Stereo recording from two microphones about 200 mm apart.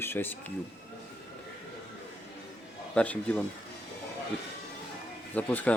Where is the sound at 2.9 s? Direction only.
5° left (ahead or behind).